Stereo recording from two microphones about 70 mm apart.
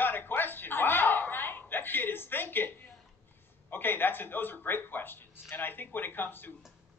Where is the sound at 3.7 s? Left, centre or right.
Left.